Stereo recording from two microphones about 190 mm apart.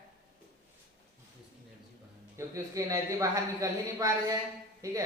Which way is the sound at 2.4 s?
15° right (ahead or behind).